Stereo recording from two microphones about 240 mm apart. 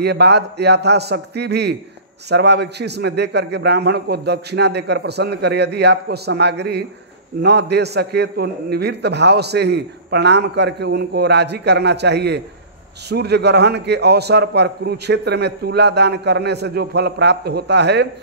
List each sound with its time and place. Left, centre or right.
0.0 s a man's voice: right